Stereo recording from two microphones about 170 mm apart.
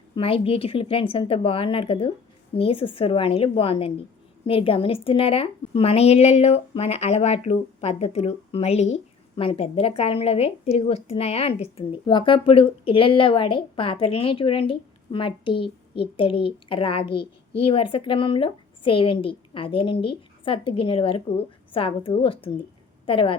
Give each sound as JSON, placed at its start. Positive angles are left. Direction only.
{"t": 0.2, "sound": "a woman's voice", "side_deg": 30}